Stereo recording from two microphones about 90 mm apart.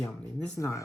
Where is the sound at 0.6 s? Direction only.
30° left (ahead or behind).